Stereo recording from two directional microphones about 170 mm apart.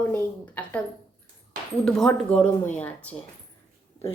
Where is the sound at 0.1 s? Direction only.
10° left (ahead or behind).